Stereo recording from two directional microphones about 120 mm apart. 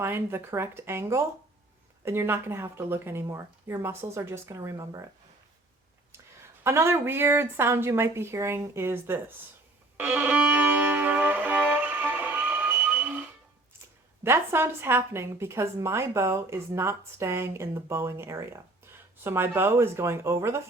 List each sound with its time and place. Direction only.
0.0 s a woman's voice: 20° right (ahead or behind)
6.6 s a woman's voice: 20° right (ahead or behind)
10.0 s music: 15° right (ahead or behind)
14.3 s a woman's voice: 20° right (ahead or behind)